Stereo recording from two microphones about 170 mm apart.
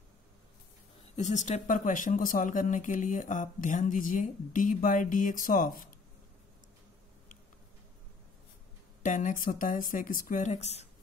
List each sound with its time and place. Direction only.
1.1 s speech: 45° left (ahead or behind)
9.0 s speech: 50° left (ahead or behind)